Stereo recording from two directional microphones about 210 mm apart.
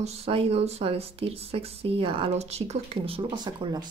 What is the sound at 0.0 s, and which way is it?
Speech, 30° right (ahead or behind).